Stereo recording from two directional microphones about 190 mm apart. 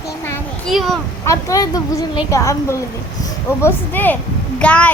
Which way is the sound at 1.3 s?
15° left (ahead or behind).